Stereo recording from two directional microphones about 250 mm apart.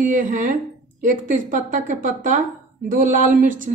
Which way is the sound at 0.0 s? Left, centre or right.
Right.